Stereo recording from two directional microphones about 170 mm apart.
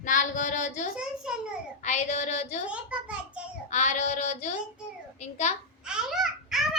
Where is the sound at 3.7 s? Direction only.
45° left (ahead or behind).